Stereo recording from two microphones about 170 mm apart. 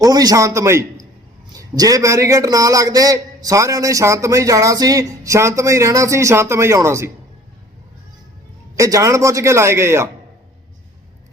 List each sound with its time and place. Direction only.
0.0 s a man's voice: 25° right (ahead or behind)
8.7 s a man's voice: 20° right (ahead or behind)